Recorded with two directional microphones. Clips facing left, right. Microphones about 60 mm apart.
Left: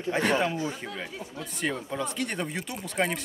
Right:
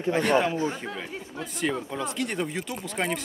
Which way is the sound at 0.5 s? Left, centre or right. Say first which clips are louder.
Right 3 dB; right.